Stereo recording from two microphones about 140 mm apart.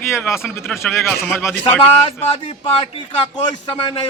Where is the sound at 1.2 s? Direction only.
15° left (ahead or behind).